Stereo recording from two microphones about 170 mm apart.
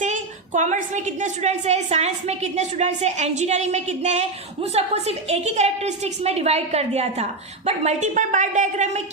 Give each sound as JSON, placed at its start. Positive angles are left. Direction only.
{"t": 0.0, "sound": "a woman's voice", "side_deg": -45}